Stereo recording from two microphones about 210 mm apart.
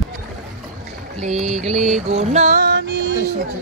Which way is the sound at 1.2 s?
35° right (ahead or behind).